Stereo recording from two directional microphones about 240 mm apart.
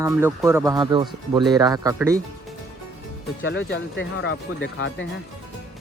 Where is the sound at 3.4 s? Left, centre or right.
Left.